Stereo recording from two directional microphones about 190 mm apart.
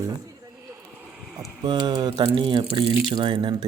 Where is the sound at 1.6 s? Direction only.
20° right (ahead or behind).